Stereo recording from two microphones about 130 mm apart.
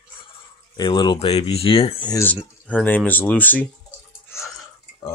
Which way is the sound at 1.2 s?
50° left (ahead or behind).